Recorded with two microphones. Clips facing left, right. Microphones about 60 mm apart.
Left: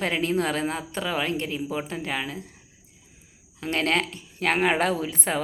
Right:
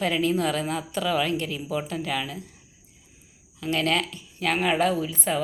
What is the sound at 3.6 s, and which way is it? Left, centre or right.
Speech, left.